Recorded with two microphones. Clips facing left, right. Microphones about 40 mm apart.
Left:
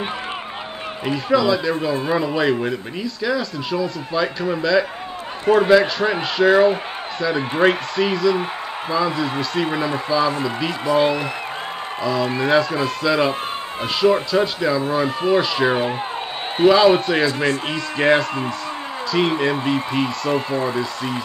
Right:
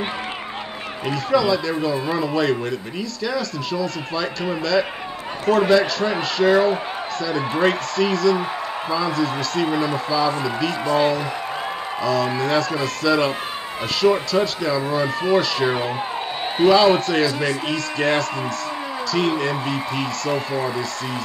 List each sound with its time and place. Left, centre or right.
1.0 s speech: centre
5.7 s speech: centre
12.0 s speech: centre
14.3 s speech: centre
17.2 s speech: left
20.5 s speech: left